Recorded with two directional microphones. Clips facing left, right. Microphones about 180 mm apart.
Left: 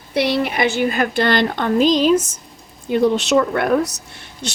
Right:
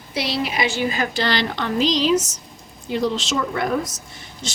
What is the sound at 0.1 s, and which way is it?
A woman's voice, 60° left (ahead or behind).